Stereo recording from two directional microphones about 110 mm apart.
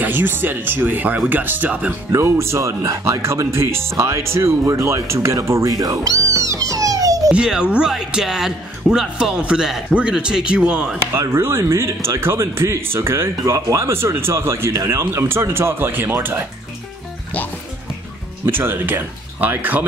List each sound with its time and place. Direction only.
0.0 s speech: 20° right (ahead or behind)
2.1 s speech: 25° right (ahead or behind)
7.2 s speech: 5° right (ahead or behind)
11.1 s speech: 25° right (ahead or behind)
18.4 s speech: 20° right (ahead or behind)